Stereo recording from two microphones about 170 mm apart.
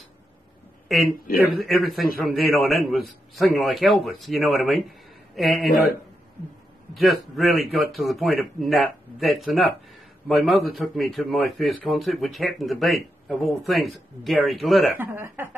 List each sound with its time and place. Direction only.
0.9 s a man's voice: centre (ahead or behind)
1.2 s a man's voice: 60° left (ahead or behind)
1.6 s a man's voice: centre (ahead or behind)
6.9 s a man's voice: centre (ahead or behind)
15.0 s speech: 15° right (ahead or behind)